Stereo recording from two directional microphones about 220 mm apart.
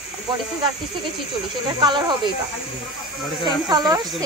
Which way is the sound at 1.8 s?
20° right (ahead or behind).